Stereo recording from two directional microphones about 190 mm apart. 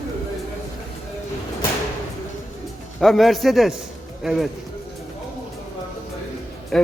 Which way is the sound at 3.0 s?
Centre (ahead or behind).